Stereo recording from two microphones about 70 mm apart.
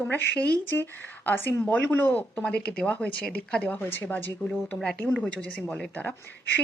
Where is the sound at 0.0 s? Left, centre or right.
Left.